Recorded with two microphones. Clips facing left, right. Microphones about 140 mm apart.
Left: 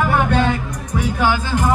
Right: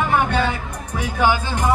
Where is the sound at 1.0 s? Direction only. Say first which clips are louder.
Even; 15° right (ahead or behind).